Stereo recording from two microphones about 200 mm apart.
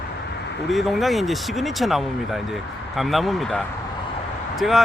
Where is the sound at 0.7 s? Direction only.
Centre (ahead or behind).